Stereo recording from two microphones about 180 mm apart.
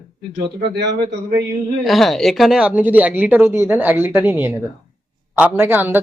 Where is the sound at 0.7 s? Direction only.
65° right (ahead or behind).